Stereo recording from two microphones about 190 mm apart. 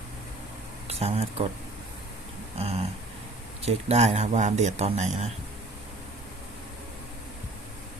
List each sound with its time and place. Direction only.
0.9 s speech: 30° right (ahead or behind)
2.6 s a man's voice: 35° right (ahead or behind)